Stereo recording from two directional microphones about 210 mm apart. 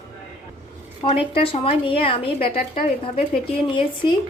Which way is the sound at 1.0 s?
25° left (ahead or behind).